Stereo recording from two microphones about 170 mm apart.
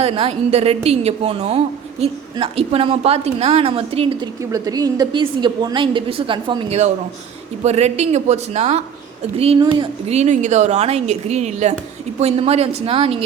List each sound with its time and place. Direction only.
0.0 s a woman's voice: 35° right (ahead or behind)
4.4 s a woman's voice: 20° right (ahead or behind)
7.6 s a woman's voice: 40° right (ahead or behind)